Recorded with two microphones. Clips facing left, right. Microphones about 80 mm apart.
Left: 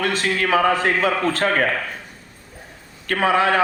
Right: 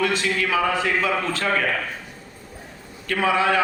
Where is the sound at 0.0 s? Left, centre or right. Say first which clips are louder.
Left 1 dB; left.